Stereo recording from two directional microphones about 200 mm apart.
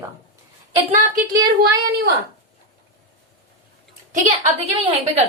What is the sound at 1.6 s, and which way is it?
Speech, 55° right (ahead or behind).